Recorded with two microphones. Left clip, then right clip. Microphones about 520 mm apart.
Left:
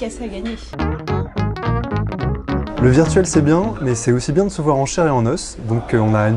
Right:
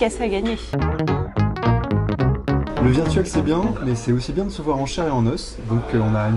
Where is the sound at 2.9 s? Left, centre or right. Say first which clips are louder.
Left 9 dB; left.